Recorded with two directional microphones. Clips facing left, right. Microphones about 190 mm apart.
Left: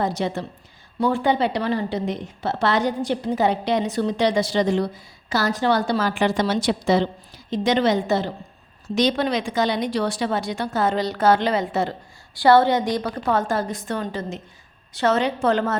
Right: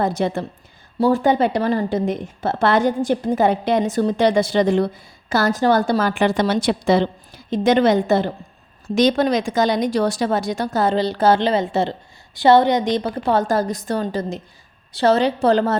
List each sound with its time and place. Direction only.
0.0 s a woman's voice: 55° right (ahead or behind)
0.9 s a woman's voice: 40° right (ahead or behind)